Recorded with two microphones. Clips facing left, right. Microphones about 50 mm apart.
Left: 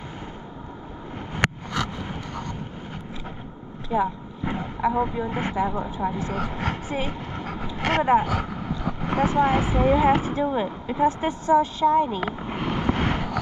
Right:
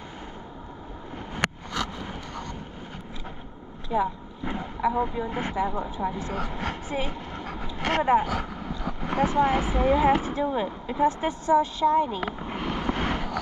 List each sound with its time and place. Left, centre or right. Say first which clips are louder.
1.3 s vehicle: left 4 dB; left
3.9 s vehicle: left 2 dB; left
5.3 s speech: left 2 dB; left
6.1 s speech: left 3 dB; left
6.9 s vehicle: left 2 dB; left
8.0 s speech: left 2 dB; left
12.3 s vehicle: left 3 dB; left